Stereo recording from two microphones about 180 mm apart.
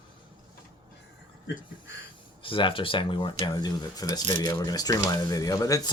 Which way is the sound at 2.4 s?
30° left (ahead or behind).